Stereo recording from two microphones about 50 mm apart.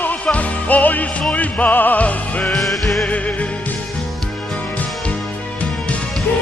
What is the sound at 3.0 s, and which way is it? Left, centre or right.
Music, left.